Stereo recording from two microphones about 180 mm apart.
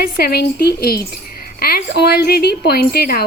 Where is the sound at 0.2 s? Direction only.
60° left (ahead or behind).